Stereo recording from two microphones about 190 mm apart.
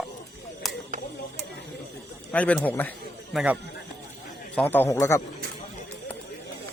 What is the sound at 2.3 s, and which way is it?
Speech, 5° left (ahead or behind).